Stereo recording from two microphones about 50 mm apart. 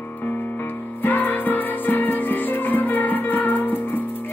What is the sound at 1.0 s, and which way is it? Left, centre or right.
Music, left.